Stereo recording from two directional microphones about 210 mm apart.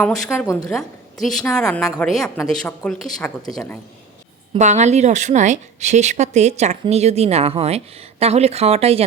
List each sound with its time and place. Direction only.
0.0 s a woman's voice: centre (ahead or behind)
1.2 s speech: centre (ahead or behind)
4.5 s speech: 35° right (ahead or behind)